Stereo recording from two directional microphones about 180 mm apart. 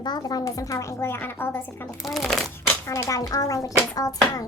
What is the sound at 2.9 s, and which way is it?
A child's voice, 15° left (ahead or behind).